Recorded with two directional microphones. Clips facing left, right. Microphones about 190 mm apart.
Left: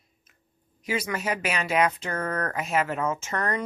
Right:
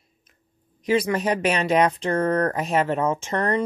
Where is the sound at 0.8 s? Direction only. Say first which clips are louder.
Right 7 dB; 35° right (ahead or behind).